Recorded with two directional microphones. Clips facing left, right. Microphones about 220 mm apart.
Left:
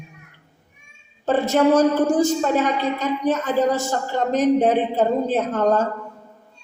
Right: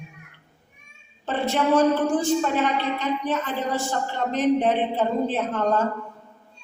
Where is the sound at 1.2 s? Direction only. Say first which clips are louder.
Left 6 dB; 40° left (ahead or behind).